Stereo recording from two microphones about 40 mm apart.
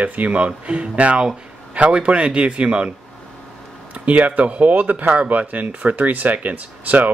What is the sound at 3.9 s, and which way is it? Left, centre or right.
Speech, right.